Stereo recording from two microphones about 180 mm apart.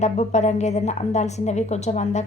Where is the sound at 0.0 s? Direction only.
40° left (ahead or behind).